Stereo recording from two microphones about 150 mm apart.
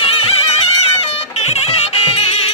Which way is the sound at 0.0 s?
40° left (ahead or behind).